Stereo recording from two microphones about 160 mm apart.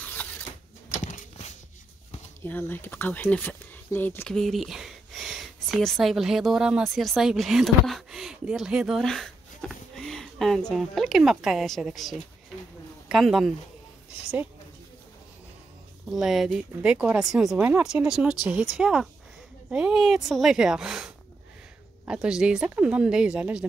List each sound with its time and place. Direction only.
0.2 s a sound: 10° left (ahead or behind)
1.0 s clip-clop: 50° left (ahead or behind)
2.4 s speech: 10° left (ahead or behind)
4.4 s speech: centre (ahead or behind)
16.1 s speech: centre (ahead or behind)